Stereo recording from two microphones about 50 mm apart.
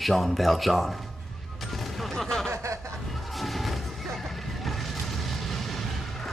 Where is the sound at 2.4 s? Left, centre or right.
Right.